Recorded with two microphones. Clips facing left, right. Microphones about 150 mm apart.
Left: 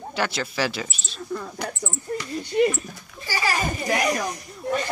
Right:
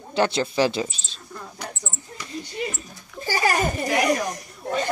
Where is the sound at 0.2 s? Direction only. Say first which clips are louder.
Right 5 dB; 25° right (ahead or behind).